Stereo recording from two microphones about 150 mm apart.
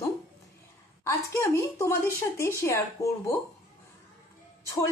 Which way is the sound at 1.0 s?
20° left (ahead or behind).